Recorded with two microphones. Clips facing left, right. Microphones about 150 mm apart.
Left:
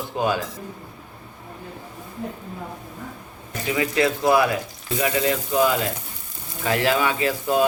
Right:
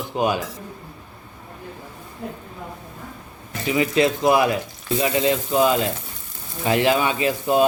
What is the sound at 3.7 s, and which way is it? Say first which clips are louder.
Speech: right 2 dB; 20° right (ahead or behind).